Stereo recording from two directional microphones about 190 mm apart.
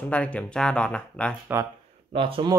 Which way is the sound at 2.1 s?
30° right (ahead or behind).